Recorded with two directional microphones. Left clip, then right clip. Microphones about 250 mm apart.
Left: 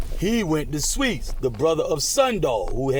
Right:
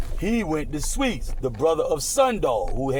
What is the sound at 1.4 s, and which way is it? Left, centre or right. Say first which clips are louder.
A man's voice: even; left.